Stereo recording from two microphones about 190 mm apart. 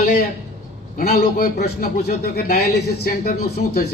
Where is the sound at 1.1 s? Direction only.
50° left (ahead or behind).